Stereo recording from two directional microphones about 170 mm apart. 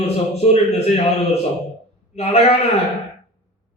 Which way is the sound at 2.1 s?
40° left (ahead or behind).